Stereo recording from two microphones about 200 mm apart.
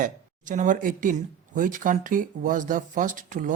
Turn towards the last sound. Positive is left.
turn(degrees=-40)  # may be behind; listen again after turning